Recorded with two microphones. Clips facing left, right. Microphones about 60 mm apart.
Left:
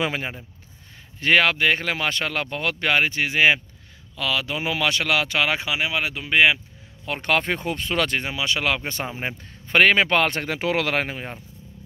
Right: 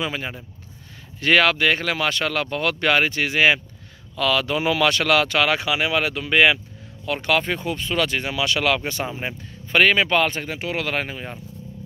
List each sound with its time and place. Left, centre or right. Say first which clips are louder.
0.0 s speech: left 2 dB; left
1.2 s speech: right 1 dB; centre
7.2 s speech: even; left
8.2 s speech: right 2 dB; left
9.7 s speech: even; left
10.9 s speech: left 1 dB; left